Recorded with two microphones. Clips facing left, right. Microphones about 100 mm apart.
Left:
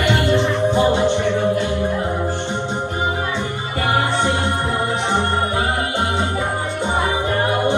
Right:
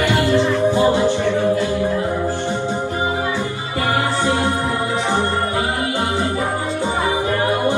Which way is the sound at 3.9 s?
20° left (ahead or behind).